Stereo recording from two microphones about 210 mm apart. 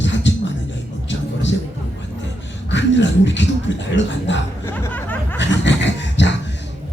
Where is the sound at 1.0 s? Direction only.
60° left (ahead or behind).